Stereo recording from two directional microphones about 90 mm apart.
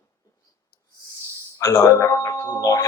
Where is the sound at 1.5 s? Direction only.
35° left (ahead or behind).